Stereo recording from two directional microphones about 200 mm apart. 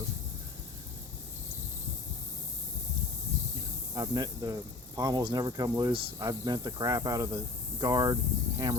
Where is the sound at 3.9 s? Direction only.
20° right (ahead or behind).